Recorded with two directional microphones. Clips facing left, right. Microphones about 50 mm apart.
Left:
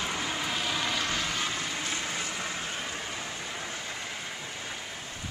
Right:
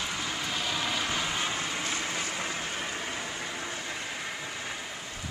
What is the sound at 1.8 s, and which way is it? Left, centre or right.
Vehicle, right.